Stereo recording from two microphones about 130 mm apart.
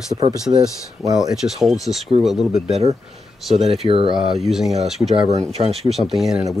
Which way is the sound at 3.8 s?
45° right (ahead or behind).